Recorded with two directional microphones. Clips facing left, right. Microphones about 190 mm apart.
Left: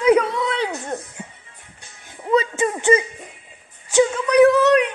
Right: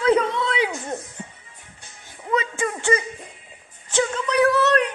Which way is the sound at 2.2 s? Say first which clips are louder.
Left 5 dB; 25° left (ahead or behind).